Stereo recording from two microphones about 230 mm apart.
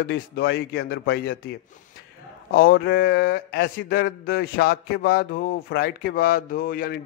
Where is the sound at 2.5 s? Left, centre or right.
Left.